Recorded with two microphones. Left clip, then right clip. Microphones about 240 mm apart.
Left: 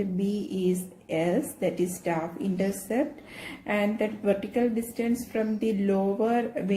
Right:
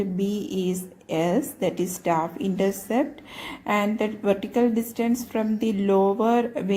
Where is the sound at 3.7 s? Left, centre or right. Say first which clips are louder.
Right 3 dB; right.